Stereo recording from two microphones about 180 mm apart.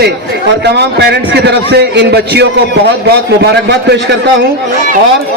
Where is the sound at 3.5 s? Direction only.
70° right (ahead or behind).